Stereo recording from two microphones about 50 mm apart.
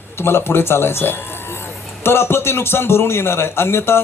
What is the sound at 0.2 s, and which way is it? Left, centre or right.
Speech, left.